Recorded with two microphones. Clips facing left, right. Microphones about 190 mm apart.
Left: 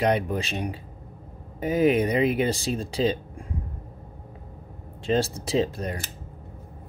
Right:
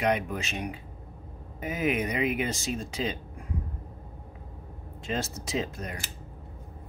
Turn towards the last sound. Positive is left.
turn(degrees=30)  # may be behind; listen again after turning